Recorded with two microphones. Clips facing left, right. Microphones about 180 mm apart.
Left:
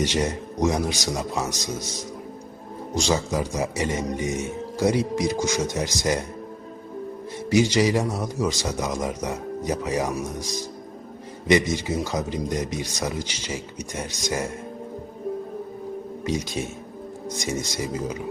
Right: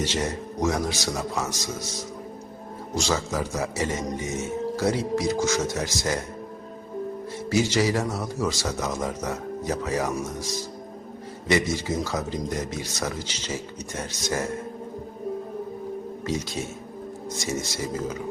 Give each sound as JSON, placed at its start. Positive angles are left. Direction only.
{"t": 0.0, "sound": "speech", "side_deg": 15}
{"t": 2.9, "sound": "speech", "side_deg": 15}
{"t": 7.5, "sound": "speech", "side_deg": 15}
{"t": 17.2, "sound": "speech", "side_deg": 15}